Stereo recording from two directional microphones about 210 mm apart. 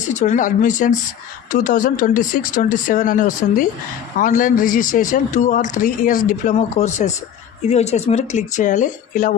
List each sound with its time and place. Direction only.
0.1 s speech: 35° left (ahead or behind)